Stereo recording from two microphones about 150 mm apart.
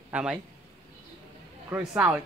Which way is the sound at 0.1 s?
5° right (ahead or behind).